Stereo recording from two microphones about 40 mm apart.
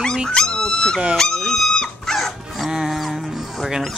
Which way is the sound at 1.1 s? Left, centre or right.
Centre.